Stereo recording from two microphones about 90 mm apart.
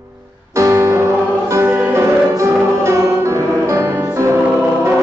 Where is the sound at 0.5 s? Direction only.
35° right (ahead or behind).